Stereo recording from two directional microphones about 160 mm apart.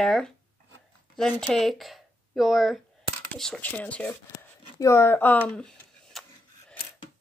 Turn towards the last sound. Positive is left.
turn(degrees=5)  # may be behind; listen again after turning